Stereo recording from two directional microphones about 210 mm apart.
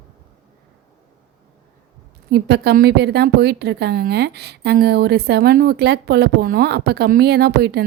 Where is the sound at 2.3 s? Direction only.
50° right (ahead or behind).